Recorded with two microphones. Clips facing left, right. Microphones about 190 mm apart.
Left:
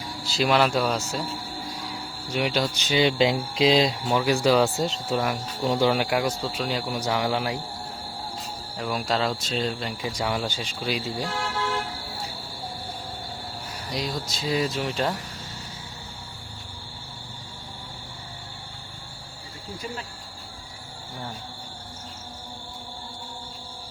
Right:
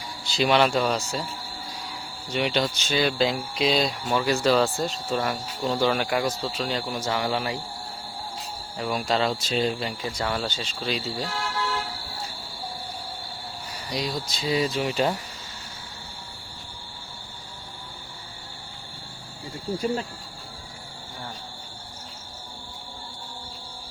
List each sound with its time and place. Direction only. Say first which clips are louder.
0.3 s speech: right 1 dB; centre (ahead or behind)
2.3 s speech: even; 5° left (ahead or behind)
2.7 s speech: left 2 dB; 15° left (ahead or behind)
6.8 s speech: left 1 dB; 15° left (ahead or behind)
8.8 s speech: right 1 dB; centre (ahead or behind)
10.0 s speech: left 4 dB; 15° left (ahead or behind)
13.9 s speech: right 1 dB; centre (ahead or behind)